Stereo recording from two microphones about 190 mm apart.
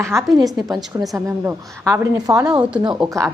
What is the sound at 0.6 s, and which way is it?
A woman's voice, 20° right (ahead or behind).